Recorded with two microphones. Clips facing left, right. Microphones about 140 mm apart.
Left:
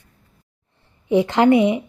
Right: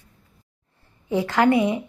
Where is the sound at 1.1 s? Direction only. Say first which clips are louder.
Left 4 dB; 20° left (ahead or behind).